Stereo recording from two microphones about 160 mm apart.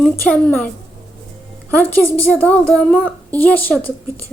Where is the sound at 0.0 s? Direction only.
10° left (ahead or behind).